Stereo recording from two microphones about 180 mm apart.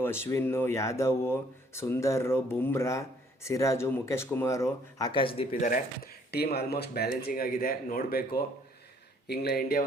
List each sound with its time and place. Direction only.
0.0 s speech: 15° left (ahead or behind); by 5.5 s 30° left (ahead or behind)
5.5 s speech: 50° left (ahead or behind)